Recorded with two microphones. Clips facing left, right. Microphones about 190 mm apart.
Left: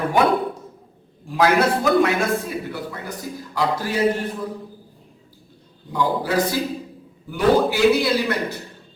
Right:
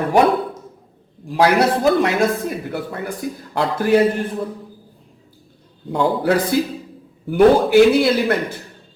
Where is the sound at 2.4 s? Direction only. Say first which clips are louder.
Right 3 dB; 55° right (ahead or behind).